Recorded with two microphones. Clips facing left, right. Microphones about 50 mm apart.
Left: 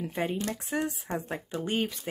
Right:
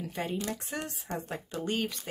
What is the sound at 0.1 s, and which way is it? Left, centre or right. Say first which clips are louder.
Speech: left 2 dB; centre.